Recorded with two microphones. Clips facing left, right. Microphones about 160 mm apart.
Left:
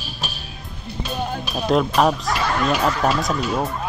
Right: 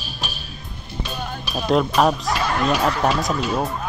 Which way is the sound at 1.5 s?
Centre (ahead or behind).